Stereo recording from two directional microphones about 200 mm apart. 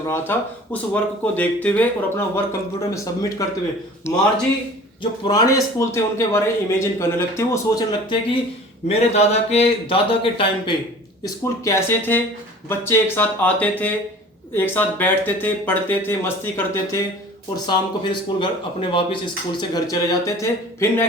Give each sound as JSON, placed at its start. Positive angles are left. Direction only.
{"t": 0.1, "sound": "a man's voice", "side_deg": 10}
{"t": 5.2, "sound": "a man's voice", "side_deg": 20}
{"t": 8.9, "sound": "speech", "side_deg": 30}
{"t": 11.4, "sound": "a man's voice", "side_deg": 15}
{"t": 17.5, "sound": "speech", "side_deg": 20}